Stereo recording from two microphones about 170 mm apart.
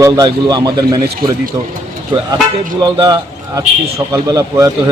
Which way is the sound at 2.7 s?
25° right (ahead or behind).